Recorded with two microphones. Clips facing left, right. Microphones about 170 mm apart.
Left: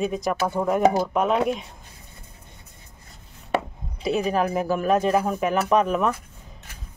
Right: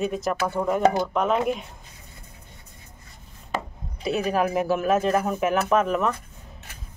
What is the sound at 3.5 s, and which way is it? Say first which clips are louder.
Chopping: left 5 dB; 65° left (ahead or behind).